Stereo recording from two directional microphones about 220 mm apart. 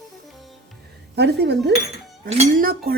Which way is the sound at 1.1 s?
50° right (ahead or behind).